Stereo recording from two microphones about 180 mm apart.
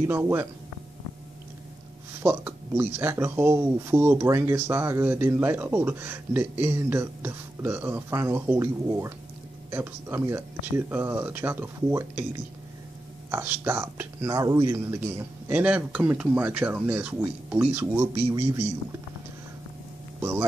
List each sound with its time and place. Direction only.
0.0 s speech: 15° right (ahead or behind)
2.2 s speech: 10° right (ahead or behind)
20.2 s speech: 15° right (ahead or behind)